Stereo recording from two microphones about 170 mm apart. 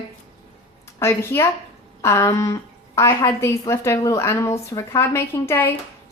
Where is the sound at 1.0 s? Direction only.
15° left (ahead or behind).